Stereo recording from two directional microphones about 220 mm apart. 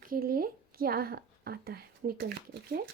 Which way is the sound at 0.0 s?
40° right (ahead or behind).